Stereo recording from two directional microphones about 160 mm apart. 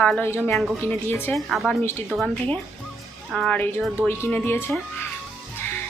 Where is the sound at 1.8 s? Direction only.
15° left (ahead or behind).